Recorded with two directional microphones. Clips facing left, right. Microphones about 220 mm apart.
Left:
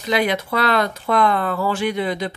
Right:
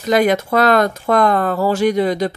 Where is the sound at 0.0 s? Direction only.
45° right (ahead or behind).